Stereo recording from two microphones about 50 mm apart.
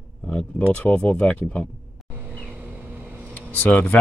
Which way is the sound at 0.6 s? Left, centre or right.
Left.